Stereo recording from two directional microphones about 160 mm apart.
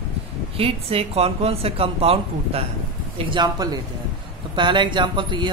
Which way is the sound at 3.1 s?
30° right (ahead or behind).